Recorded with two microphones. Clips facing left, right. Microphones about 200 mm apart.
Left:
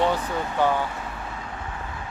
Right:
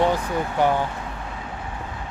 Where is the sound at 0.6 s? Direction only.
15° right (ahead or behind).